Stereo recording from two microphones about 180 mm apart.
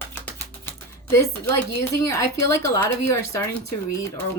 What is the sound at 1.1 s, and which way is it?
Speech, 15° left (ahead or behind).